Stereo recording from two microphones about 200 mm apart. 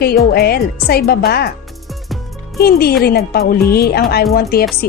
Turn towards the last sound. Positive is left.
turn(degrees=50)  # may be behind; listen again after turning